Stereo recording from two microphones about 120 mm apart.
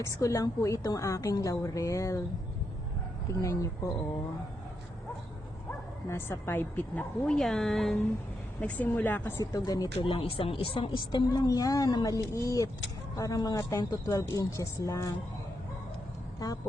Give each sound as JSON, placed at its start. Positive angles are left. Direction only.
{"t": 0.0, "sound": "a woman's voice", "side_deg": 25}
{"t": 3.4, "sound": "a woman's voice", "side_deg": 25}
{"t": 6.1, "sound": "a woman's voice", "side_deg": 20}
{"t": 8.6, "sound": "a woman's voice", "side_deg": 15}
{"t": 9.4, "sound": "speech", "side_deg": 30}
{"t": 10.0, "sound": "a woman's voice", "side_deg": 50}